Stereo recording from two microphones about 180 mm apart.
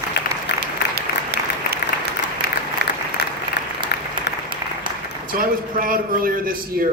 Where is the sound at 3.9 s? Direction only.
60° left (ahead or behind).